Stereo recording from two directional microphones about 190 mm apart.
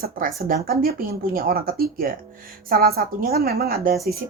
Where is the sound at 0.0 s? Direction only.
50° right (ahead or behind).